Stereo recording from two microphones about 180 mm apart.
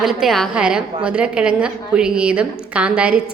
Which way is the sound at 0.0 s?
Centre (ahead or behind).